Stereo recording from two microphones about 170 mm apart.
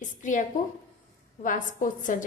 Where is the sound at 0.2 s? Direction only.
45° left (ahead or behind).